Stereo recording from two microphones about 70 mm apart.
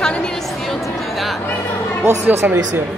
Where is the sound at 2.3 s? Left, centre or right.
Right.